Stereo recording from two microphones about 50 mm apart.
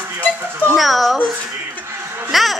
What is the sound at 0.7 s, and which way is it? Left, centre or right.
Speech, centre.